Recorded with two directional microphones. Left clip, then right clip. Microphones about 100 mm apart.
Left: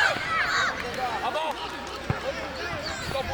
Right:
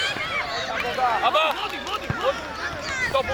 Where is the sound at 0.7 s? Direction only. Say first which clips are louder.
Right 7 dB; 20° right (ahead or behind).